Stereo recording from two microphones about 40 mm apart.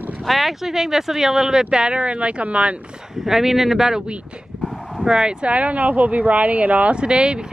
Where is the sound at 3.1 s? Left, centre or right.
Centre.